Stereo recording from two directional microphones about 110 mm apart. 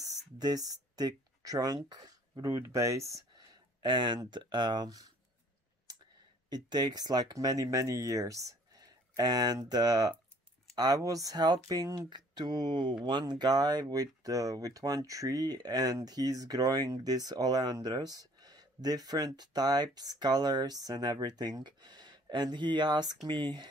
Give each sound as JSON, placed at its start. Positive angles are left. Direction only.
{"t": 0.0, "sound": "a sound", "side_deg": -35}
{"t": 1.9, "sound": "speech", "side_deg": -40}
{"t": 3.8, "sound": "speech", "side_deg": -40}
{"t": 6.5, "sound": "speech", "side_deg": -40}